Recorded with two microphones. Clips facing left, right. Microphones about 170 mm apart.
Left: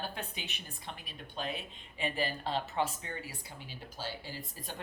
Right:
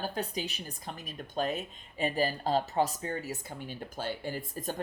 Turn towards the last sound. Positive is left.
turn(degrees=-50)  # may be behind; listen again after turning